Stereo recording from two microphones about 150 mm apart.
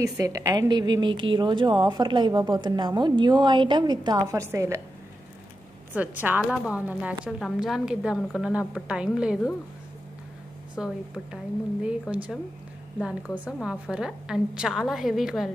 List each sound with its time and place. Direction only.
0.0 s a woman's voice: 25° right (ahead or behind)
5.9 s a woman's voice: 10° right (ahead or behind)
10.8 s a woman's voice: centre (ahead or behind)